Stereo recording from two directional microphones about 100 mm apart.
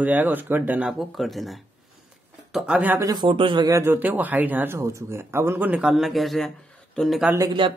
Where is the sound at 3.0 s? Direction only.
40° right (ahead or behind).